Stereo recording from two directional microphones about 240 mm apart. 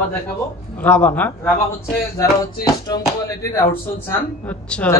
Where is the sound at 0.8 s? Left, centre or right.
Centre.